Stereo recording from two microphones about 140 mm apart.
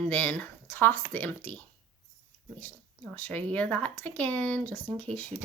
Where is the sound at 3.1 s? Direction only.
10° left (ahead or behind).